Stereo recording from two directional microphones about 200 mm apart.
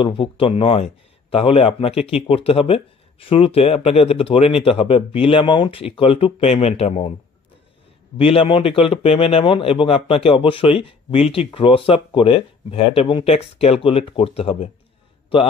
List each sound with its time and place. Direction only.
0.0 s a man's voice: 25° left (ahead or behind)
8.2 s a man's voice: 25° left (ahead or behind)